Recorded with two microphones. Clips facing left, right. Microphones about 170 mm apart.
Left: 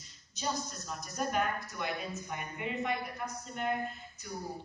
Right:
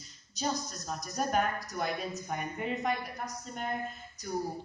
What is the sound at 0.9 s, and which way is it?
A woman's voice, 40° right (ahead or behind).